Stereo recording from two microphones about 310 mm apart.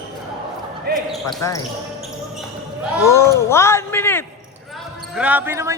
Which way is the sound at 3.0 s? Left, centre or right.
Centre.